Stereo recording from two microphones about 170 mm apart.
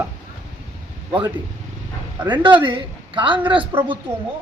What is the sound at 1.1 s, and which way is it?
Speech, 25° right (ahead or behind).